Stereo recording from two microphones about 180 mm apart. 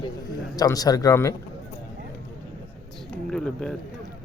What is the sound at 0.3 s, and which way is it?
A man's voice, 20° left (ahead or behind).